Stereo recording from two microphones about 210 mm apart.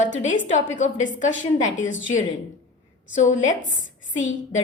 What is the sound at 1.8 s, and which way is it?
Speech, 65° left (ahead or behind).